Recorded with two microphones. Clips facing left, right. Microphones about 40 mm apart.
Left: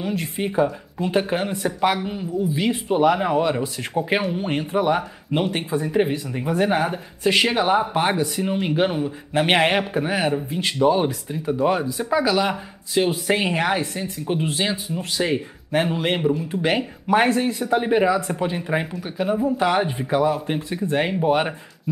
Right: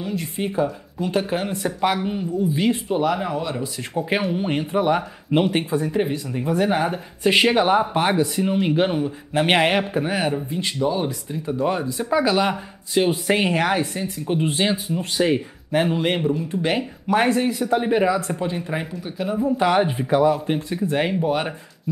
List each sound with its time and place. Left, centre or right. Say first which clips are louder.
0.0 s speech: left 1 dB; centre
1.4 s speech: left 1 dB; centre
3.0 s speech: left 4 dB; left
3.6 s speech: left 1 dB; centre
5.9 s speech: left 2 dB; centre
6.6 s speech: left 1 dB; centre
7.2 s speech: right 2 dB; centre
10.7 s speech: left 5 dB; left
11.2 s speech: left 2 dB; centre
12.1 s speech: right 1 dB; centre
14.5 s speech: right 2 dB; centre
15.2 s speech: right 3 dB; centre
19.2 s speech: even; centre
21.3 s speech: left 3 dB; centre